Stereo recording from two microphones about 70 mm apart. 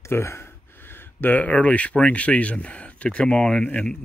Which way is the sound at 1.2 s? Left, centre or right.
Left.